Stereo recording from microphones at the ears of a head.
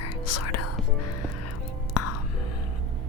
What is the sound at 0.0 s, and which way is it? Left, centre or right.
Whispering, left.